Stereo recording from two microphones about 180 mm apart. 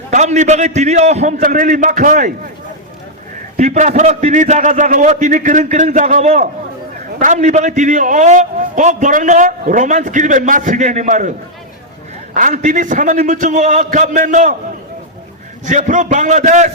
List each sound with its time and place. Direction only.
0.1 s a man's voice: 40° right (ahead or behind)
3.6 s a man's voice: 40° right (ahead or behind)
15.6 s a man's voice: 45° right (ahead or behind)